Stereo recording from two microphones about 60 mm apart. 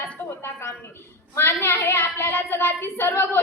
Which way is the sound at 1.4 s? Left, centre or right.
Left.